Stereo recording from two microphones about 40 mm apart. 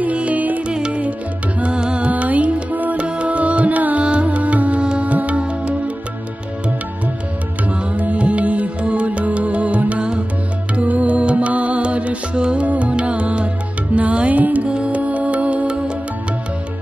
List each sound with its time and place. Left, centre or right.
0.0 s music: right
0.7 s music: right
2.0 s music: right
3.1 s music: right
7.9 s music: right
12.4 s music: right
12.6 s music: right